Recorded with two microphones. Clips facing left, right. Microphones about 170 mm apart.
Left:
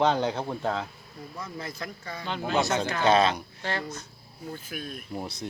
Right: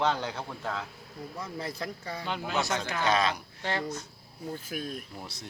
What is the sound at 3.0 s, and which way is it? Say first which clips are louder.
Speech: left 6 dB; 30° left (ahead or behind).